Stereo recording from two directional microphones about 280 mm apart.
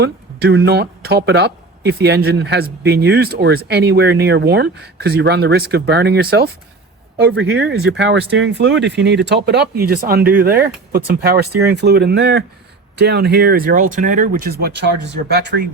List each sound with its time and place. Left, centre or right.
0.0 s speech: right